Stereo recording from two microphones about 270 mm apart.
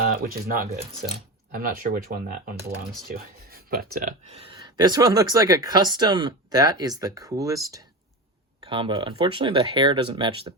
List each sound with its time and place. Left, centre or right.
0.0 s speech: right